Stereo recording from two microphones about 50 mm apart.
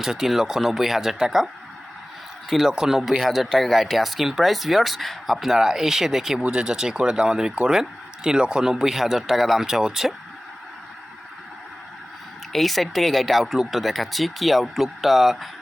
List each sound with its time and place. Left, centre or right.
0.0 s speech: centre
2.5 s speech: centre
3.2 s speech: centre
6.4 s speech: centre
12.5 s speech: centre